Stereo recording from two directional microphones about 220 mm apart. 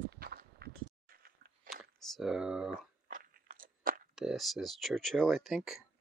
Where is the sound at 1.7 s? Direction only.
40° right (ahead or behind).